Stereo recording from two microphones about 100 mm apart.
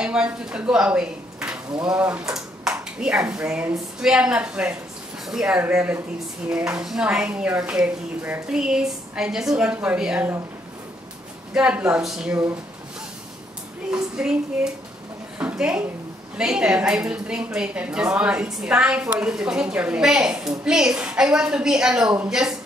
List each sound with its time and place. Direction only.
0.0 s a woman's voice: 10° right (ahead or behind)
5.6 s a woman's voice: 15° right (ahead or behind)
11.5 s a woman's voice: 10° right (ahead or behind)
13.8 s a woman's voice: 5° right (ahead or behind)
15.3 s a sound: 10° right (ahead or behind)
16.3 s a woman's voice: 5° right (ahead or behind)